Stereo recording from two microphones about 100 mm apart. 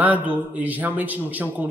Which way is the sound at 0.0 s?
15° right (ahead or behind).